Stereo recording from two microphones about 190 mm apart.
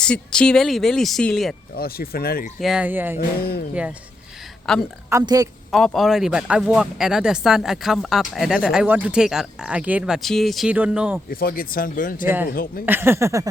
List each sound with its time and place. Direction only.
0.0 s speech: 5° left (ahead or behind)
1.7 s speech: 55° left (ahead or behind)
2.6 s speech: 5° right (ahead or behind)
3.2 s speech: 55° left (ahead or behind)
4.7 s speech: centre (ahead or behind)
5.0 s speech: 15° right (ahead or behind)
5.7 s speech: centre (ahead or behind)
11.3 s speech: 50° left (ahead or behind)
12.8 s speech: 10° right (ahead or behind)